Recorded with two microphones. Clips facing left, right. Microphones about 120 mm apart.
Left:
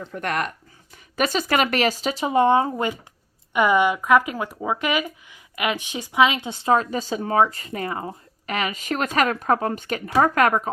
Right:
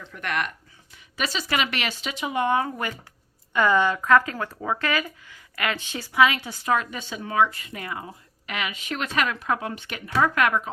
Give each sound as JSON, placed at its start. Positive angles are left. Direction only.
{"t": 0.0, "sound": "speech", "side_deg": 40}